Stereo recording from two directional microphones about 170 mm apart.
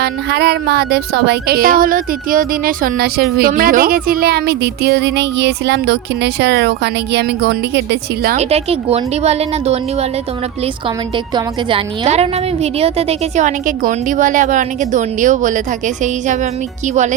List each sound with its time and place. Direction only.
0.0 s speech: 70° right (ahead or behind)
8.4 s a woman's voice: 35° right (ahead or behind)
12.0 s a woman's voice: 40° right (ahead or behind)